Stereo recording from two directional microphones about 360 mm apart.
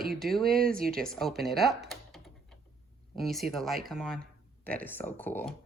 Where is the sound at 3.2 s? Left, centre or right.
Centre.